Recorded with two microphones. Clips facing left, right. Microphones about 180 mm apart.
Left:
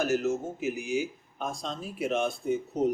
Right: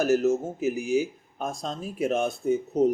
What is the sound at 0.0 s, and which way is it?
Speech, 40° right (ahead or behind).